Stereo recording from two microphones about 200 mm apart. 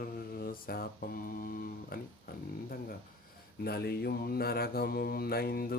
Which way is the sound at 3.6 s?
50° left (ahead or behind).